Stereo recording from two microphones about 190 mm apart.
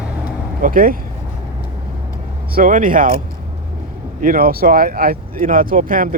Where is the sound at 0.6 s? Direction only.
50° right (ahead or behind).